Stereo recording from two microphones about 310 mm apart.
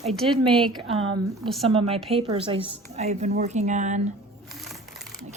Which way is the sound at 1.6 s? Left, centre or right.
Centre.